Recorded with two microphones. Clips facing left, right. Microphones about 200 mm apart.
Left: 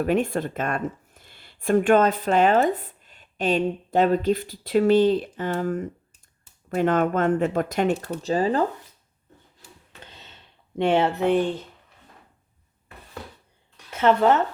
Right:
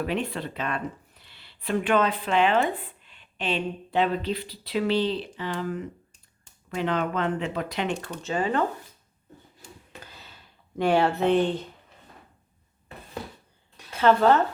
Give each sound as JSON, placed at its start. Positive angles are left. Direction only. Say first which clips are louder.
{"t": 0.0, "sound": "speech", "louder": "left 6 dB", "side_deg": 45}
{"t": 8.2, "sound": "speech", "louder": "left 3 dB", "side_deg": 35}
{"t": 10.0, "sound": "a sound", "louder": "left 1 dB", "side_deg": 25}
{"t": 13.9, "sound": "speech", "louder": "left 1 dB", "side_deg": 20}